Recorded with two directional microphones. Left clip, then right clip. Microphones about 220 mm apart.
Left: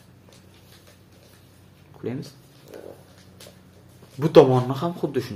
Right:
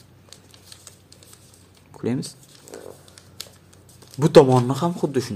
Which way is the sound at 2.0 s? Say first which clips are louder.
Right 5 dB; 40° right (ahead or behind).